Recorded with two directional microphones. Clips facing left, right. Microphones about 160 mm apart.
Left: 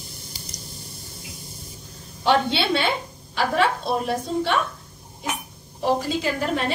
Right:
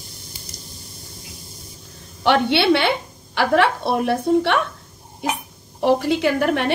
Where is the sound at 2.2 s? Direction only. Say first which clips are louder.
Right 3 dB; 65° right (ahead or behind).